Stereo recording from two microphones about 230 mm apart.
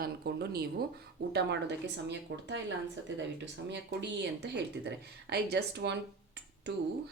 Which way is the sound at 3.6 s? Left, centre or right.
Right.